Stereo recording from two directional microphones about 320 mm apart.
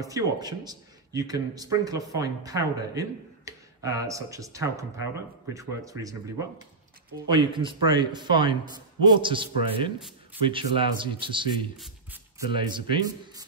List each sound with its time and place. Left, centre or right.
0.0 s a man's voice: centre
7.2 s a man's voice: centre